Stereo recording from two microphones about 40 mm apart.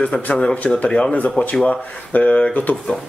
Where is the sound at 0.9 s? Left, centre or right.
Left.